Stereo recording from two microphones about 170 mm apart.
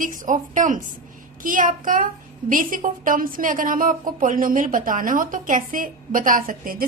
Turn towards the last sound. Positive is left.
turn(degrees=-55)  # may be behind; listen again after turning